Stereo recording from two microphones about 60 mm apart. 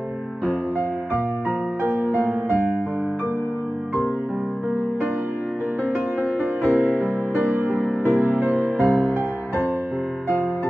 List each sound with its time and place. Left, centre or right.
1.8 s music: right
6.6 s music: right